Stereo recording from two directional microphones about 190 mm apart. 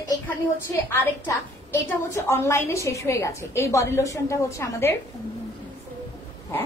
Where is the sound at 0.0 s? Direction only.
15° left (ahead or behind).